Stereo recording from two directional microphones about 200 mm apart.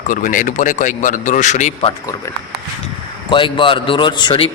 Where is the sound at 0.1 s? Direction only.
40° left (ahead or behind).